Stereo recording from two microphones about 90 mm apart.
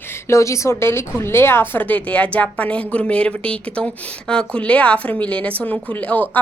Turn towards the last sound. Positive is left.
turn(degrees=15)  # may be behind; listen again after turning